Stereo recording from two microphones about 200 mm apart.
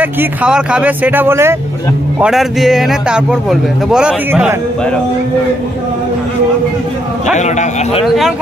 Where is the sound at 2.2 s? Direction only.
Centre (ahead or behind).